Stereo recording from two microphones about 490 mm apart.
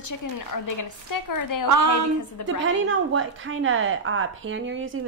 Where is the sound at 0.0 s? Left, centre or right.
Left.